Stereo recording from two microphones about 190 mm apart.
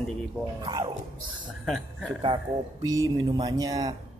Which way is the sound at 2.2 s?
20° right (ahead or behind).